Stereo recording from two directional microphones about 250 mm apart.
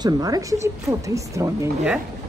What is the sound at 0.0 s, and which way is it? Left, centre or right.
Speech, centre.